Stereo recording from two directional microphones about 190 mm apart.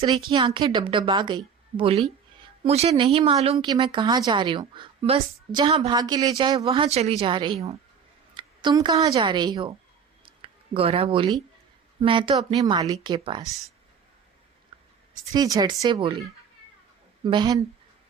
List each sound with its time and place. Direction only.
0.3 s a woman's voice: 25° right (ahead or behind)
6.0 s a woman's voice: 20° right (ahead or behind)
6.6 s a woman's voice: 30° right (ahead or behind)
10.2 s a sound: 30° right (ahead or behind)
12.0 s a woman's voice: 25° right (ahead or behind)
14.7 s a sound: 30° right (ahead or behind)
15.3 s a woman's voice: 20° right (ahead or behind)
17.2 s a woman's voice: 20° right (ahead or behind)